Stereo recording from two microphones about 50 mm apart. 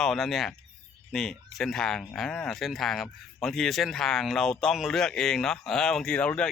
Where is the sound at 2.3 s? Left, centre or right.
Centre.